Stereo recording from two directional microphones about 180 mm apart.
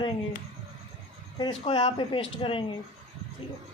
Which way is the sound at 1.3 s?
25° left (ahead or behind).